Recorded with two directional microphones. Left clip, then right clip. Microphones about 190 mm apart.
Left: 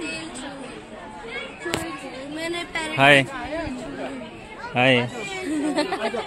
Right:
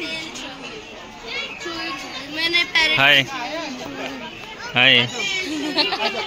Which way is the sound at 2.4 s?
55° left (ahead or behind).